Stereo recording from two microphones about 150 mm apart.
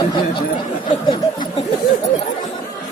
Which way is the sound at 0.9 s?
30° left (ahead or behind).